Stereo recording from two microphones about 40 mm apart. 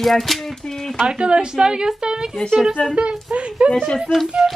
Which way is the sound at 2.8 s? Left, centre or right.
Left.